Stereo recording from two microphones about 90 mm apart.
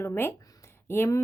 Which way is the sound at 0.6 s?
25° left (ahead or behind).